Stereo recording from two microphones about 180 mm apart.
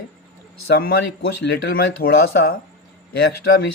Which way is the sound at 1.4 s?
70° left (ahead or behind).